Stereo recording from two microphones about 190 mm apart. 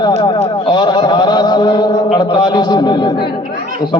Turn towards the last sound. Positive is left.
turn(degrees=25)  # may be behind; listen again after turning